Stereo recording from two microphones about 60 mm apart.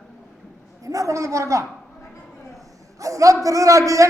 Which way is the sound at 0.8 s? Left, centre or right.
Right.